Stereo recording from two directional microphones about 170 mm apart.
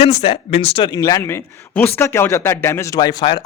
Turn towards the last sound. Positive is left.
turn(degrees=25)  # may be behind; listen again after turning